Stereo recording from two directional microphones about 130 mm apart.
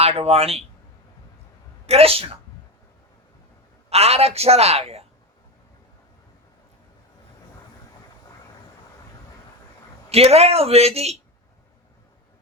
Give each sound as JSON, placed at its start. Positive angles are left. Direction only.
{"t": 0.0, "sound": "a woman's voice", "side_deg": -50}
{"t": 1.9, "sound": "a woman's voice", "side_deg": -50}
{"t": 3.8, "sound": "a woman's voice", "side_deg": -55}
{"t": 10.1, "sound": "a woman's voice", "side_deg": -50}